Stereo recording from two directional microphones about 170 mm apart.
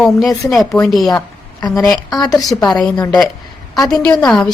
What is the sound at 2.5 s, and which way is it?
A woman's voice, 5° left (ahead or behind).